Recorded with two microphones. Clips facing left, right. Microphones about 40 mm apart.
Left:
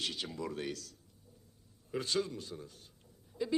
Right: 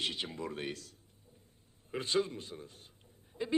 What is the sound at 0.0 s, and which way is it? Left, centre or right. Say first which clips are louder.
A man's voice: right 1 dB; right.